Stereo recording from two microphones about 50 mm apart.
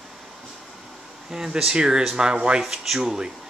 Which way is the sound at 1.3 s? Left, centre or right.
Centre.